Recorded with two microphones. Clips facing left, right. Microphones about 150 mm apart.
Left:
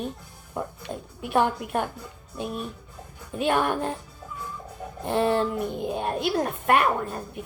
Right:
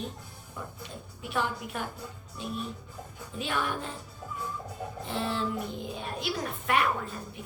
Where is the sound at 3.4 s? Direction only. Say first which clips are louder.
Left 8 dB; 55° left (ahead or behind).